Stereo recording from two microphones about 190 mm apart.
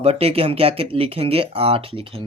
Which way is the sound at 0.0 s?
30° right (ahead or behind).